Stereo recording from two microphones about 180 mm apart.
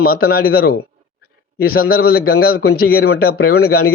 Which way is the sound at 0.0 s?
55° left (ahead or behind).